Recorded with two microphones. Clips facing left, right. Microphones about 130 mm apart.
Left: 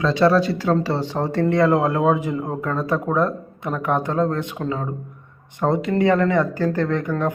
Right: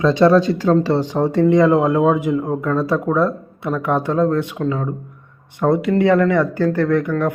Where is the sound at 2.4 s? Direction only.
10° left (ahead or behind).